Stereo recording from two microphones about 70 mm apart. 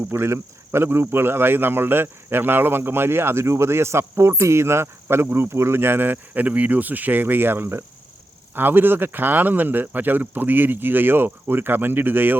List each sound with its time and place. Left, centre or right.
0.0 s speech: right